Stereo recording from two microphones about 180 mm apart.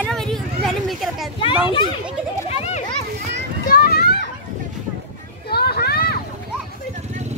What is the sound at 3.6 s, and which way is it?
Children playing, 55° left (ahead or behind).